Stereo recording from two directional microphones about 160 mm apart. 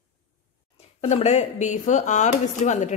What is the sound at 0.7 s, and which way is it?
A woman's voice, 40° left (ahead or behind).